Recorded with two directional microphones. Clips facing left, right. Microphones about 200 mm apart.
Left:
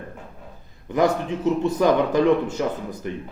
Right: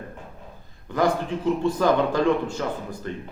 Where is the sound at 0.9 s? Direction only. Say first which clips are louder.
Left 2 dB; 20° left (ahead or behind).